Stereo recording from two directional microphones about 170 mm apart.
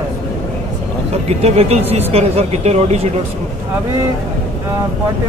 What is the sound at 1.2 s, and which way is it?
Speech, 40° right (ahead or behind).